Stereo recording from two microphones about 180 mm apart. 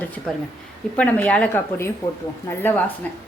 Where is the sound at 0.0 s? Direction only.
10° left (ahead or behind).